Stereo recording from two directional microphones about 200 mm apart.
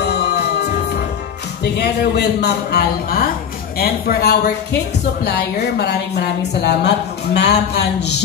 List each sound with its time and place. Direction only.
0.1 s music: 55° left (ahead or behind)
1.8 s a man's voice: 55° left (ahead or behind)